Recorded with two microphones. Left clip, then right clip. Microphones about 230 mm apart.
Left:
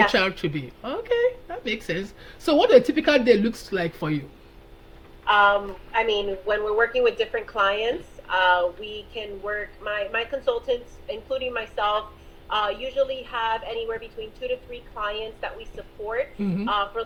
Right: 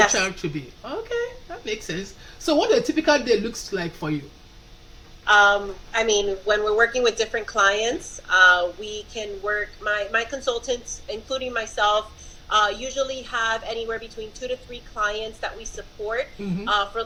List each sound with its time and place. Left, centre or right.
0.1 s speech: left
5.2 s speech: right
5.9 s a woman's voice: right
16.7 s a woman's voice: right